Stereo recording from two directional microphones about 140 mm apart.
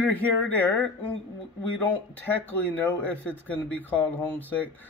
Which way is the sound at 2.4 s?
10° left (ahead or behind).